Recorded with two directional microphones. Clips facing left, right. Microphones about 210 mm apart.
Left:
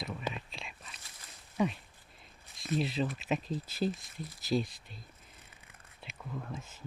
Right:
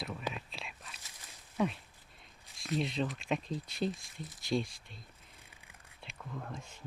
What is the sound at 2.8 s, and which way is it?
Speech, 5° left (ahead or behind).